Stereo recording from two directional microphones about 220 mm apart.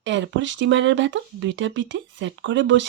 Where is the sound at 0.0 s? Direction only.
55° right (ahead or behind).